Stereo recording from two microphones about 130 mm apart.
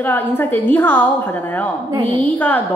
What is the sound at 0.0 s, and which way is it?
A woman's voice, 15° left (ahead or behind).